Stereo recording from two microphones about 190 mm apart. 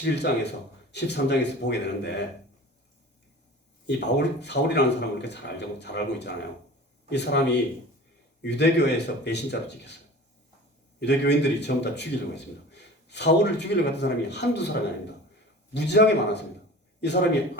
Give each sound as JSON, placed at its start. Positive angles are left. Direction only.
{"t": 0.0, "sound": "speech", "side_deg": 65}
{"t": 3.8, "sound": "speech", "side_deg": 65}
{"t": 11.0, "sound": "speech", "side_deg": 65}
{"t": 15.7, "sound": "speech", "side_deg": 65}